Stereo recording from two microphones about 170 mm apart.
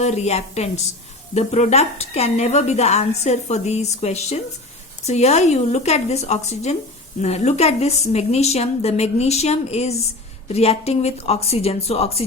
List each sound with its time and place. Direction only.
0.0 s a woman's voice: 40° left (ahead or behind)